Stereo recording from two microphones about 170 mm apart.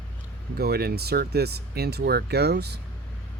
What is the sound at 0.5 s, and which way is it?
Speech, 65° right (ahead or behind).